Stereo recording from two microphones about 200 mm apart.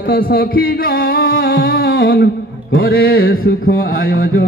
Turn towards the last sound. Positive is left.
turn(degrees=45)  # may be behind; listen again after turning